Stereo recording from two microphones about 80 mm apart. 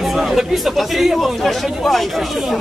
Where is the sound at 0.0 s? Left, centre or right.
Centre.